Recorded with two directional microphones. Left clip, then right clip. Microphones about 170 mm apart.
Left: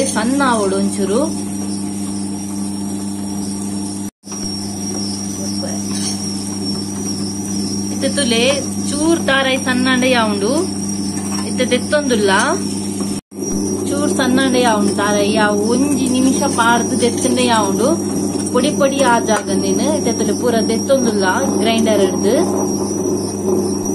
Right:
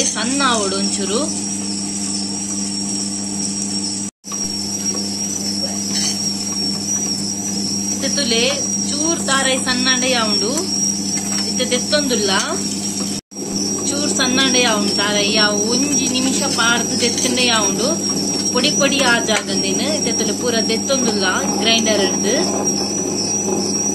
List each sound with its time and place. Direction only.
0.2 s speech: centre (ahead or behind)
8.0 s a sound: centre (ahead or behind)
9.0 s speech: centre (ahead or behind)
13.9 s speech: centre (ahead or behind)